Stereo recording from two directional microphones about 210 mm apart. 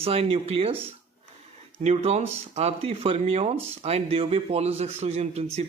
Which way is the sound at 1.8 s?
30° right (ahead or behind).